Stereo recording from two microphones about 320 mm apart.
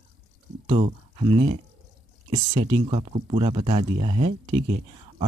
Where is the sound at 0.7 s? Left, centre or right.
Centre.